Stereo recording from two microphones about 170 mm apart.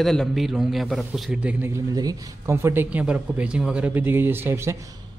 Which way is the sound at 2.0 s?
20° right (ahead or behind).